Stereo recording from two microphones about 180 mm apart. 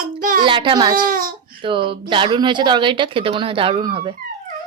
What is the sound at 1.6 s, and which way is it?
Speech, 30° right (ahead or behind).